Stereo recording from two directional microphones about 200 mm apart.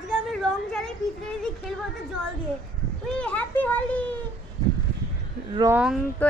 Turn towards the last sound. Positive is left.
turn(degrees=-5)  # may be behind; listen again after turning